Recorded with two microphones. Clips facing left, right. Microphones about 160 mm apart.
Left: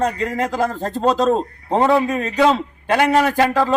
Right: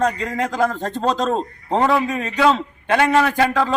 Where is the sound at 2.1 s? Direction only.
10° left (ahead or behind).